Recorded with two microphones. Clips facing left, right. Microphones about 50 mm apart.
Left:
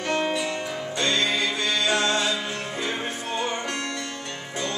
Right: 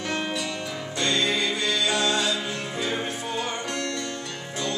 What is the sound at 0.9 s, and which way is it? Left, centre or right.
Music, left.